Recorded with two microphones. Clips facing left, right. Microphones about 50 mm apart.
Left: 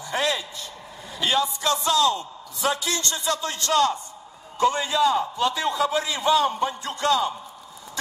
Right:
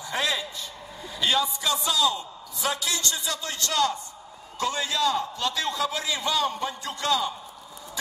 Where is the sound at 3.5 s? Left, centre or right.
Centre.